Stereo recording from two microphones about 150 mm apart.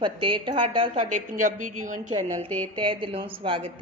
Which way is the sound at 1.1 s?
60° right (ahead or behind).